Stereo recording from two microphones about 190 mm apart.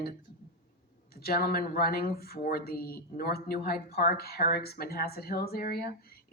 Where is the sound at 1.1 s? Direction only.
55° left (ahead or behind).